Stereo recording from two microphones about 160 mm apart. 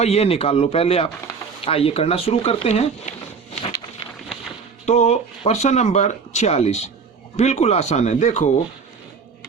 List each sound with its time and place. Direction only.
0.0 s speech: 40° left (ahead or behind)
4.9 s speech: 45° left (ahead or behind)